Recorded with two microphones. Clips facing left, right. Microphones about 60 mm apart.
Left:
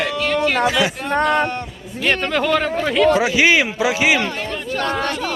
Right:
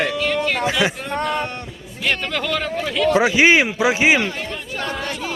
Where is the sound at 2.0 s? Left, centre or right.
Left.